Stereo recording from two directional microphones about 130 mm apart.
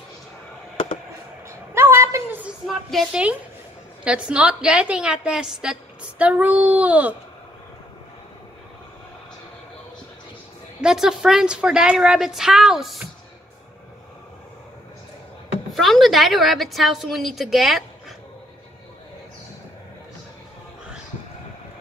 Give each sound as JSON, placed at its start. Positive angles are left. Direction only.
{"t": 1.7, "sound": "a sound", "side_deg": -20}
{"t": 2.4, "sound": "a woman's voice", "side_deg": 0}
{"t": 10.8, "sound": "a woman's voice", "side_deg": -5}
{"t": 15.7, "sound": "a woman's voice", "side_deg": 0}